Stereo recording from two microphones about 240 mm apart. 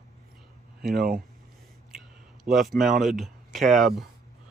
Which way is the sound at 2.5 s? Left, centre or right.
Right.